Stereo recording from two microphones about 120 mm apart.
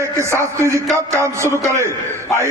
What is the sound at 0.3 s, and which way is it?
A man's voice, 25° right (ahead or behind).